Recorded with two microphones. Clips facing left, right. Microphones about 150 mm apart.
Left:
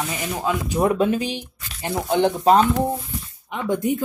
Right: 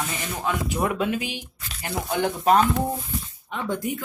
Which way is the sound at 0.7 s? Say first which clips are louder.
Left 8 dB; 30° left (ahead or behind).